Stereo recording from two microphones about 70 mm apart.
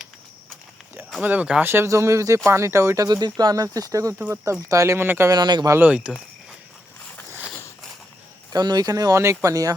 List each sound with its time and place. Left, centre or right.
1.2 s speech: right
1.6 s speech: right
3.1 s speech: right
4.9 s speech: right
5.3 s speech: right
5.8 s speech: centre
8.5 s speech: right
9.2 s speech: right